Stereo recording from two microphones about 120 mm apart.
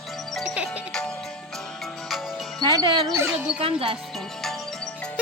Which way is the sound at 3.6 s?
50° right (ahead or behind).